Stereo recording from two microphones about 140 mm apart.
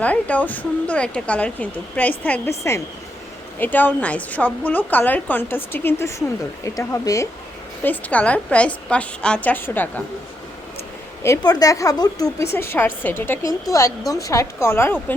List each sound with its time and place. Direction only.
0.0 s a woman's voice: 10° left (ahead or behind)
7.9 s speech: 10° left (ahead or behind)
11.2 s a woman's voice: 25° left (ahead or behind)